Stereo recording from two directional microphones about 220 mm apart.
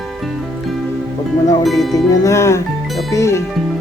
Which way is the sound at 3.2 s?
15° left (ahead or behind).